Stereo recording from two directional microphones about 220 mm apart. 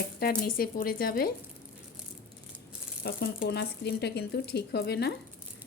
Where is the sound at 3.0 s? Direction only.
45° left (ahead or behind).